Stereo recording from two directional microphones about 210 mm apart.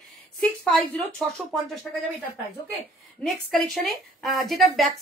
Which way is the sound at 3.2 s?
Centre (ahead or behind).